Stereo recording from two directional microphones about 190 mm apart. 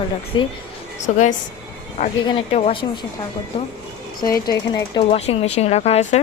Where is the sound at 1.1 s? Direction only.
40° left (ahead or behind).